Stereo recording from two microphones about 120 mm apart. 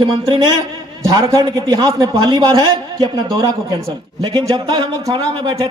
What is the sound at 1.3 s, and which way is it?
A man's voice, 35° right (ahead or behind).